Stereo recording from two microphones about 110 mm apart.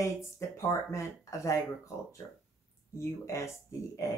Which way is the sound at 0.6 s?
30° left (ahead or behind).